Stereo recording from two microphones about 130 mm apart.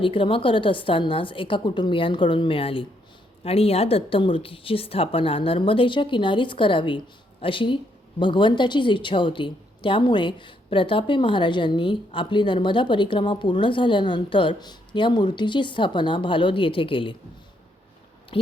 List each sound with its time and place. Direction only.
0.0 s a woman's voice: 40° left (ahead or behind)